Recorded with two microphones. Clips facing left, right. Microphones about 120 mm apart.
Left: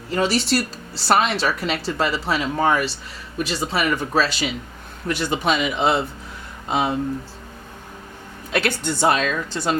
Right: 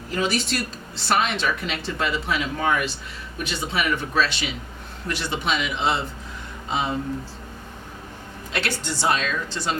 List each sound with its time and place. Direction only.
0.2 s a woman's voice: 30° left (ahead or behind); by 6.9 s 55° left (ahead or behind)
8.5 s a woman's voice: 50° left (ahead or behind)